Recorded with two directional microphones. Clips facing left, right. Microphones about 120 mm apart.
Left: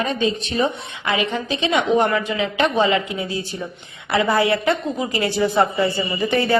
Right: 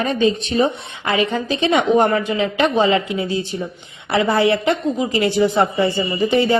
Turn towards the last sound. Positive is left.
turn(degrees=-15)  # may be behind; listen again after turning